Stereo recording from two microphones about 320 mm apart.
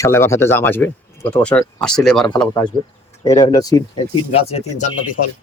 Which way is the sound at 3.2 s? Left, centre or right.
Centre.